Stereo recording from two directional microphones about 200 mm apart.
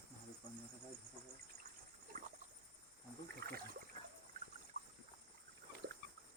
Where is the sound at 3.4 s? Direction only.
55° right (ahead or behind).